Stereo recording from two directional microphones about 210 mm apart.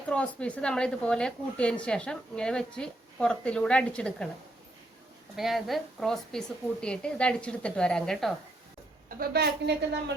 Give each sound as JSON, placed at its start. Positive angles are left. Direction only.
{"t": 0.1, "sound": "a woman's voice", "side_deg": 5}
{"t": 5.4, "sound": "a woman's voice", "side_deg": 0}
{"t": 9.0, "sound": "a woman's voice", "side_deg": -45}